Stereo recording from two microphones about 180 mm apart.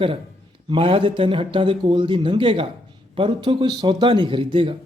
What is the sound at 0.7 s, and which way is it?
Speech, 30° right (ahead or behind).